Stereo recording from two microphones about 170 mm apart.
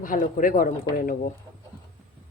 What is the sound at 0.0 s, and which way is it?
A woman's voice, 50° left (ahead or behind).